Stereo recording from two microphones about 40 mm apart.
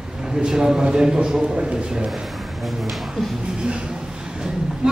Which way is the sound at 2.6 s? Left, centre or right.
Centre.